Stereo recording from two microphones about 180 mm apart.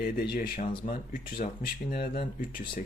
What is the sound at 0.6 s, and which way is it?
Speech, 30° left (ahead or behind).